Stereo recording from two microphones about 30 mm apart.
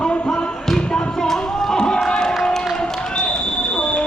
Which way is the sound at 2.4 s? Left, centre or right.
Centre.